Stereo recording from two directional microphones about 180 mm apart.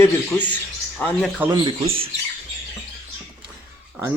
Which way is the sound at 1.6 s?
30° right (ahead or behind).